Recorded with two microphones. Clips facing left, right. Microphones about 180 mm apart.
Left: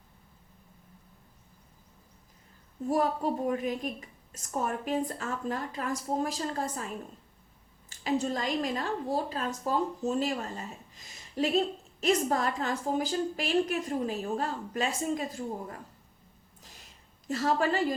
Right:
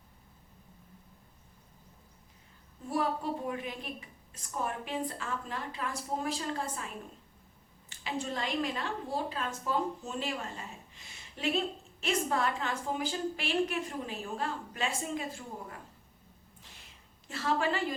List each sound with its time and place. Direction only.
2.8 s a woman's voice: 40° left (ahead or behind)
17.2 s a woman's voice: 40° left (ahead or behind)